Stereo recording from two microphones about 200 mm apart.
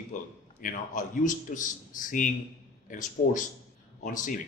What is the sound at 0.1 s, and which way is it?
A man's voice, 40° left (ahead or behind).